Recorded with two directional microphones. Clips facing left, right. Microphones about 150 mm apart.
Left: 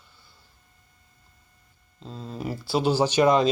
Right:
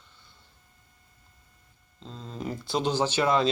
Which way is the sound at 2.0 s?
10° left (ahead or behind).